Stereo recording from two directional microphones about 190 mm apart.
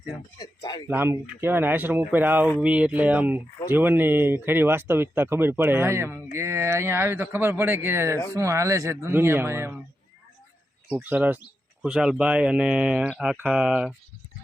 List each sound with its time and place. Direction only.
0.3 s speech: 20° left (ahead or behind)
0.9 s speech: 10° right (ahead or behind)
11.0 s speech: 10° right (ahead or behind)